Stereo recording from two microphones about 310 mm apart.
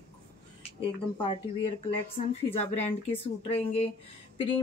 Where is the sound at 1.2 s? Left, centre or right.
Centre.